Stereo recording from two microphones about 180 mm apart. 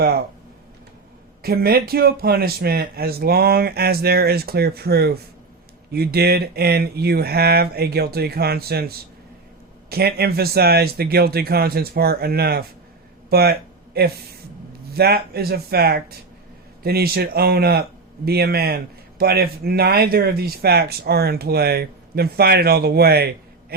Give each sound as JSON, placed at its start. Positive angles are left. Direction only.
{"t": 1.4, "sound": "speech", "side_deg": -55}